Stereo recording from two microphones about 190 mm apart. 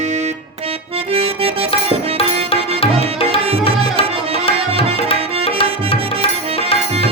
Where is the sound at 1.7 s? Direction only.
30° left (ahead or behind).